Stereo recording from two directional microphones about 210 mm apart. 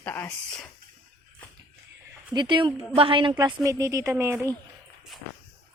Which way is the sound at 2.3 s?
20° right (ahead or behind).